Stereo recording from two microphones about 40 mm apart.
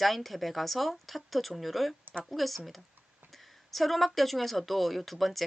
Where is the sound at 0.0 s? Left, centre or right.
Centre.